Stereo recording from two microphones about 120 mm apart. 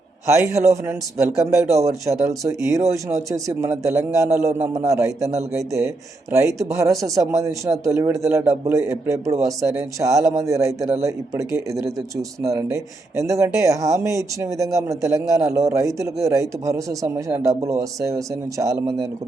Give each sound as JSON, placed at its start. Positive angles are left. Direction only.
{"t": 0.3, "sound": "speech", "side_deg": -25}